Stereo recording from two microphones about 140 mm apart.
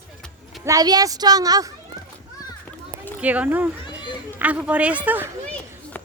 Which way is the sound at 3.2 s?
10° right (ahead or behind).